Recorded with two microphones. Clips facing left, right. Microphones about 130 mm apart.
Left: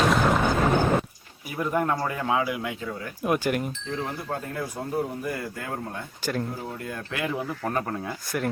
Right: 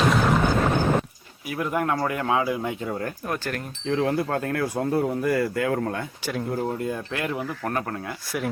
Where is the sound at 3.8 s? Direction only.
90° right.